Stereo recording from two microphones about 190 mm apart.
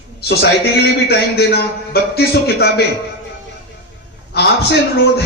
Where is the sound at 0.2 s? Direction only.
55° left (ahead or behind).